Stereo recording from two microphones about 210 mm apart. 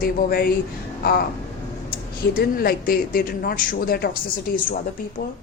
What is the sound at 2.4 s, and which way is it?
A woman's voice, 45° left (ahead or behind).